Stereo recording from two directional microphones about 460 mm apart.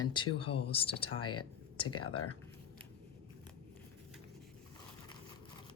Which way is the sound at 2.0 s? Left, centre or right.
Left.